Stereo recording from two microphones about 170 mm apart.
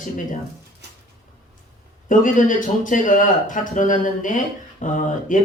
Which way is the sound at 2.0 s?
50° left (ahead or behind).